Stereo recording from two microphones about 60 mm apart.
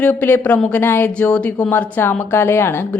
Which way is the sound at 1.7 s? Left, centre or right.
Left.